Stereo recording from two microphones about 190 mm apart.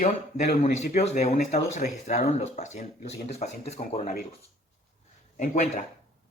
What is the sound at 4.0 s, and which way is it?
Speech, 50° left (ahead or behind).